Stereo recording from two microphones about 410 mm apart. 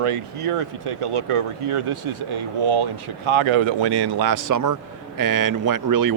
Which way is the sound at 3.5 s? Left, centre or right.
Right.